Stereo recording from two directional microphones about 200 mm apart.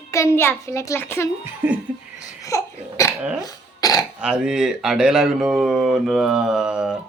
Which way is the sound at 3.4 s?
20° left (ahead or behind).